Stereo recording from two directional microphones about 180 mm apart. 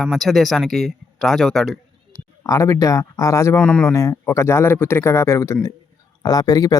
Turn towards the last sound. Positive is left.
turn(degrees=20)  # may be behind; listen again after turning